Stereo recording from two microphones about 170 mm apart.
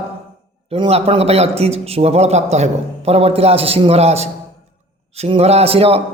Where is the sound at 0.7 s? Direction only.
35° right (ahead or behind).